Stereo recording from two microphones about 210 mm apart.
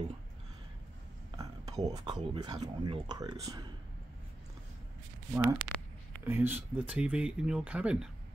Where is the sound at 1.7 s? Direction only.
20° right (ahead or behind).